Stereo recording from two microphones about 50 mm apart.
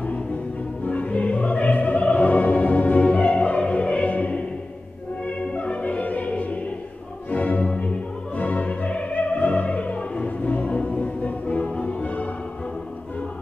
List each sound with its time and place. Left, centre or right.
0.8 s opera: left
5.2 s music: left
7.7 s opera: left
11.8 s music: left